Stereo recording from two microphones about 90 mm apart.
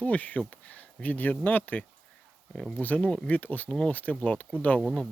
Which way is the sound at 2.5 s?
5° left (ahead or behind).